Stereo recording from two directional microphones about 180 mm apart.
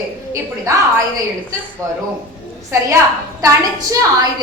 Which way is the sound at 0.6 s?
15° right (ahead or behind).